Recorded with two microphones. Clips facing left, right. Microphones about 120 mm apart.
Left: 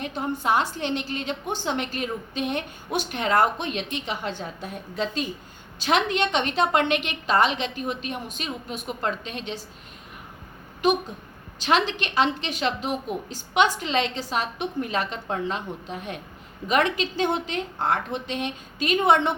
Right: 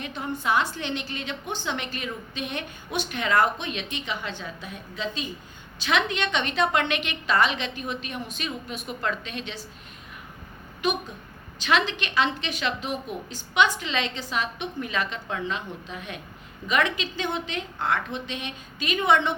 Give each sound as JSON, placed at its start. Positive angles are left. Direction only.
{"t": 0.0, "sound": "a woman's voice", "side_deg": 40}
{"t": 11.6, "sound": "a woman's voice", "side_deg": 35}